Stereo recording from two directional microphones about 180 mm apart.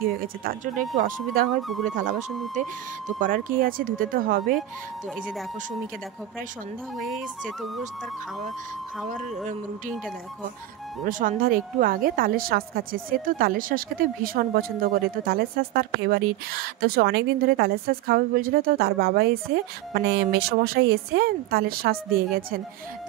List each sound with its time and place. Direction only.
0.2 s speech: 50° right (ahead or behind)
1.6 s music: centre (ahead or behind)
2.0 s speech: 45° right (ahead or behind)
7.0 s music: centre (ahead or behind)
11.1 s a woman's voice: 50° right (ahead or behind)